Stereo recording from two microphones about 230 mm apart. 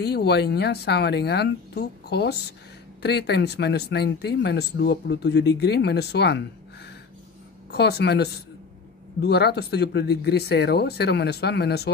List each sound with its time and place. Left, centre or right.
0.0 s speech: left
7.7 s speech: left